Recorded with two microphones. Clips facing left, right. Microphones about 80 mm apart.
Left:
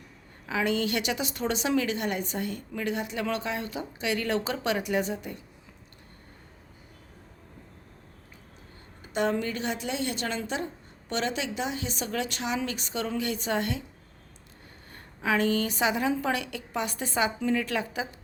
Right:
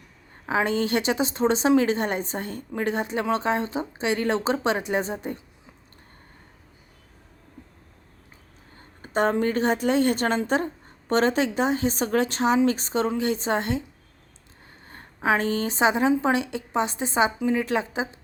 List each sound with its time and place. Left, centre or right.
0.4 s a woman's voice: right
9.0 s a woman's voice: right
14.8 s speech: right